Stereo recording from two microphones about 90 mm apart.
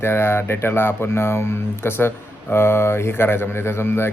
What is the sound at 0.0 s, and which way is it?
Speech, 25° left (ahead or behind).